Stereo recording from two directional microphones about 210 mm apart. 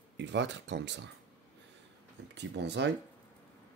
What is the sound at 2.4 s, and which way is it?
Speech, 55° right (ahead or behind).